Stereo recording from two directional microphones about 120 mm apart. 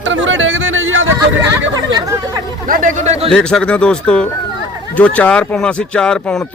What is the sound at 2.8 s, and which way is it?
Speech, 80° right.